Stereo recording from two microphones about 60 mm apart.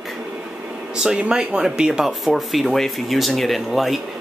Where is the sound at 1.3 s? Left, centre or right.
Centre.